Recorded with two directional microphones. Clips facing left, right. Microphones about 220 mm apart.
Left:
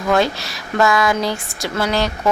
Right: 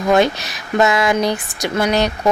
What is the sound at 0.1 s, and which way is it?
Speech, 20° right (ahead or behind).